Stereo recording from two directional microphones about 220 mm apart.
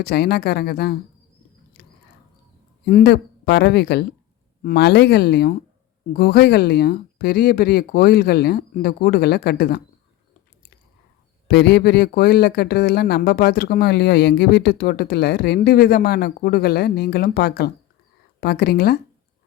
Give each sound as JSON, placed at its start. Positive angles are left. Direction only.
{"t": 0.0, "sound": "speech", "side_deg": 45}
{"t": 2.8, "sound": "speech", "side_deg": 45}
{"t": 11.4, "sound": "speech", "side_deg": 50}